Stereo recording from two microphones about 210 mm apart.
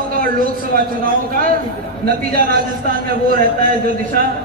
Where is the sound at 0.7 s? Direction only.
45° right (ahead or behind).